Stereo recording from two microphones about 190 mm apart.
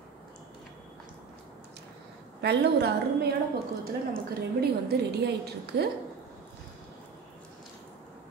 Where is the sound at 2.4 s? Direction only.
60° right (ahead or behind).